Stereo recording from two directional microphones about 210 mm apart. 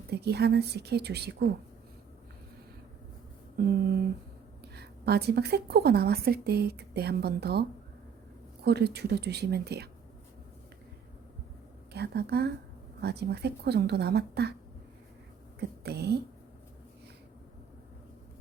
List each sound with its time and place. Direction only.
0.1 s a woman's voice: 50° right (ahead or behind)
3.7 s a woman's voice: 50° right (ahead or behind)
8.6 s a woman's voice: 50° right (ahead or behind)
11.9 s a woman's voice: 50° right (ahead or behind)
15.8 s speech: 50° right (ahead or behind)